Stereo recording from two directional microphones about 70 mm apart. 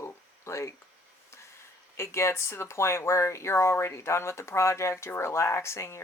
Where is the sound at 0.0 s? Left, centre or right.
Left.